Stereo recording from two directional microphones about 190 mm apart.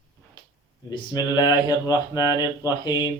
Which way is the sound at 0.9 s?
20° left (ahead or behind).